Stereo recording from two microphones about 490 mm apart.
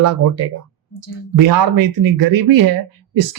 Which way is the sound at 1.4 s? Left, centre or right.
Right.